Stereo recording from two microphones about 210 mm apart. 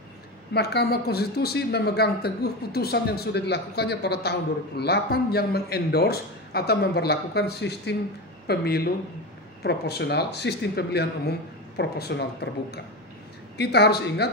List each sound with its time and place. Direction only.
0.5 s speech: 50° left (ahead or behind)